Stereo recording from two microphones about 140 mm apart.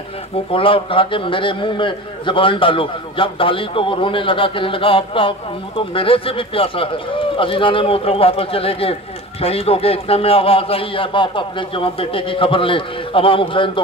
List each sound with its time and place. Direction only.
0.5 s a man's voice: 40° left (ahead or behind)